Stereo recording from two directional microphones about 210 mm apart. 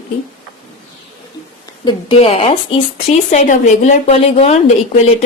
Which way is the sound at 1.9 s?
25° left (ahead or behind).